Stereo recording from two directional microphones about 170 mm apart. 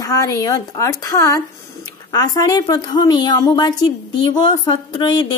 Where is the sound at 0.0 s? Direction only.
20° left (ahead or behind).